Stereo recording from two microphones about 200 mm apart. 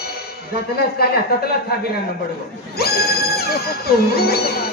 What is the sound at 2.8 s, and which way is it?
Speech, 50° left (ahead or behind).